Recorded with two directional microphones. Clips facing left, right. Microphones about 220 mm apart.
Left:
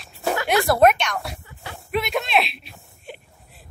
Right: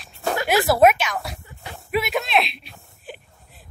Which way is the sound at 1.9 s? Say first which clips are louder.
Right 1 dB; 5° right (ahead or behind).